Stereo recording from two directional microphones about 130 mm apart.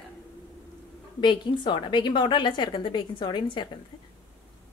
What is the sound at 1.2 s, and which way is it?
A woman's voice, 35° left (ahead or behind).